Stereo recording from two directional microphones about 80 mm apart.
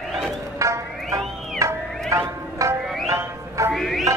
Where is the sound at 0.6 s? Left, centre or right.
Right.